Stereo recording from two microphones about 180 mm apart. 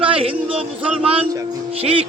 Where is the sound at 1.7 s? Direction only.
35° right (ahead or behind).